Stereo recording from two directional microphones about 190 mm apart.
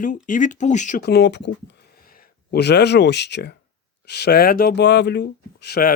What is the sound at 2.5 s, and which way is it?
Speech, 60° left (ahead or behind).